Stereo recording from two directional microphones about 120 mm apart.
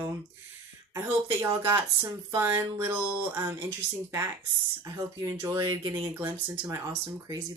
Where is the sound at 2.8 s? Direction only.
15° right (ahead or behind).